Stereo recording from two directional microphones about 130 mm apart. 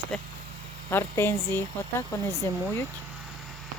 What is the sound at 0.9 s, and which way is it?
Speech, 20° left (ahead or behind).